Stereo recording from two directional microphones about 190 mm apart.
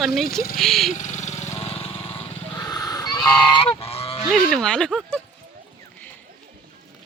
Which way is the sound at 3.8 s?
30° left (ahead or behind).